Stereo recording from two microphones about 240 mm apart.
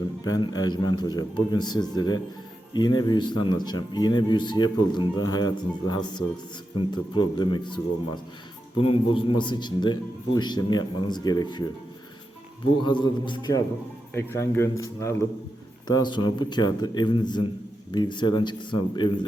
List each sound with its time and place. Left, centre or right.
0.3 s speech: centre
12.8 s speech: centre